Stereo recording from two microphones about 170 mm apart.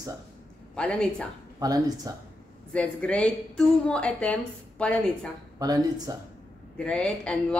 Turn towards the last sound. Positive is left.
turn(degrees=5)  # may be behind; listen again after turning